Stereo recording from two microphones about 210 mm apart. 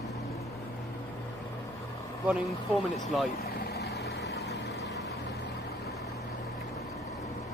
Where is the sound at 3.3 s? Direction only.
50° left (ahead or behind).